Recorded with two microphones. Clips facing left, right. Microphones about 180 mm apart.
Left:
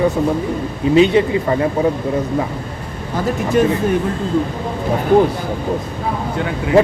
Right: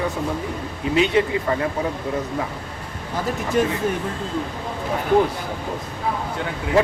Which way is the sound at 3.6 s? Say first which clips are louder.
Left 5 dB; 70° left (ahead or behind).